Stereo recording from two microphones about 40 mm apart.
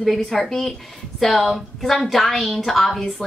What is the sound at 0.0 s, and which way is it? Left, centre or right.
A woman's voice, centre.